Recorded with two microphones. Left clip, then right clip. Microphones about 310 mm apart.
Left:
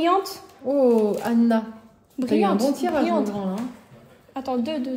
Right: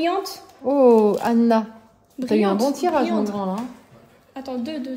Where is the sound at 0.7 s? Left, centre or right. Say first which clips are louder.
Right 4 dB; right.